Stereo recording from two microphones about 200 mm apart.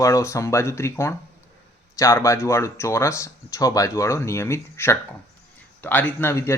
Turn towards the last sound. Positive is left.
turn(degrees=15)  # may be behind; listen again after turning